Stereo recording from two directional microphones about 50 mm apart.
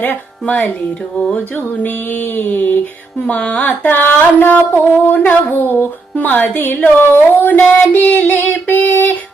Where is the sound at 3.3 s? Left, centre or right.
Left.